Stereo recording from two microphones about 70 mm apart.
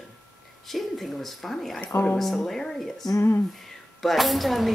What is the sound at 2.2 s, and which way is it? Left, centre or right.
Speech, centre.